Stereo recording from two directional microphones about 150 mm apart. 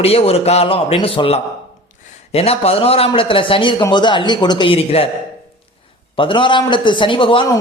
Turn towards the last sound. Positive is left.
turn(degrees=35)  # may be behind; listen again after turning